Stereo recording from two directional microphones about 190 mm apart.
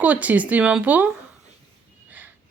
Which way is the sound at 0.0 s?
10° right (ahead or behind).